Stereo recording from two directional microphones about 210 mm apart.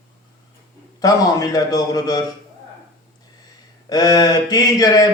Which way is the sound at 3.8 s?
20° left (ahead or behind).